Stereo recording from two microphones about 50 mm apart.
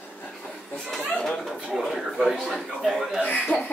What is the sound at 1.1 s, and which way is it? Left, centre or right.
Chatter, centre.